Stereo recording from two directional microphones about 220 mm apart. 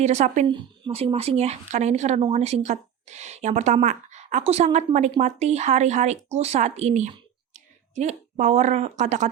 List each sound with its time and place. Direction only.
0.0 s a woman's voice: 30° right (ahead or behind)